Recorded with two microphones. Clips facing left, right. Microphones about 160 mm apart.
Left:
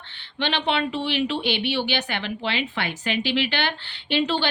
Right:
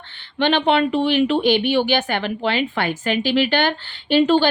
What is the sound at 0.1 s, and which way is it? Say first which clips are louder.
Speech: right 8 dB; 50° right (ahead or behind).